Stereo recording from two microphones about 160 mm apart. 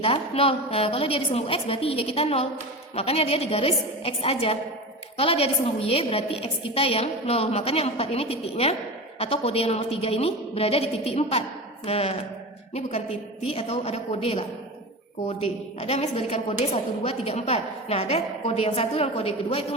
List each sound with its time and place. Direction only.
0.0 s a woman's voice: 35° left (ahead or behind)
13.4 s a woman's voice: 35° left (ahead or behind)
15.8 s a woman's voice: 40° left (ahead or behind)